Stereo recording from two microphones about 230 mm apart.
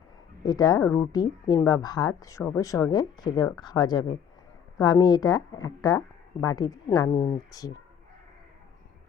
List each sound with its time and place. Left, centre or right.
0.4 s a woman's voice: centre